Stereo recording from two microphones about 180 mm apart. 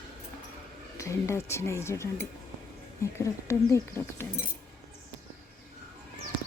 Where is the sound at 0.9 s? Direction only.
15° left (ahead or behind).